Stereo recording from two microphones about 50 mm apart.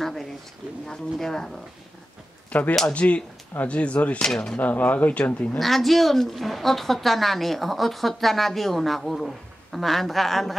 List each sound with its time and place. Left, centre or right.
0.0 s a sound: centre
1.2 s speech: centre
2.9 s speech: left
4.3 s speech: centre
4.6 s speech: left
5.6 s a woman's voice: centre